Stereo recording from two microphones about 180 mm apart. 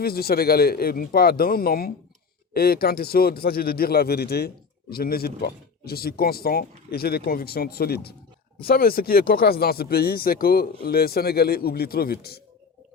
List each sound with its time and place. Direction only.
0.0 s a man's voice: 60° left (ahead or behind)